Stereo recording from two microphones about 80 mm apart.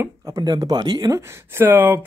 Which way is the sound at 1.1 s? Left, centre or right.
Right.